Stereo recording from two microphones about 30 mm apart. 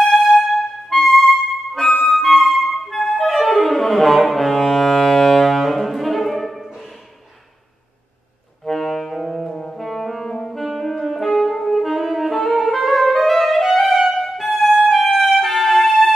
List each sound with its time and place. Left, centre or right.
0.4 s music: centre
5.4 s music: centre
8.6 s music: centre
9.3 s brass instrument: centre
10.2 s music: centre
10.5 s music: centre
11.5 s saxophone: centre
13.9 s music: centre